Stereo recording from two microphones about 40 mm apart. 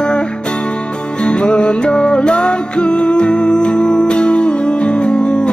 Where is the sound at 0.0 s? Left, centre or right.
Left.